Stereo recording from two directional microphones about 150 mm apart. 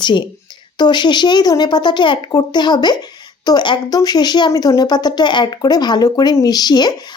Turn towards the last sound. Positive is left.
turn(degrees=25)  # may be behind; listen again after turning